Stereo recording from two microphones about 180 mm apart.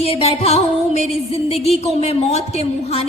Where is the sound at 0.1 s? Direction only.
35° left (ahead or behind).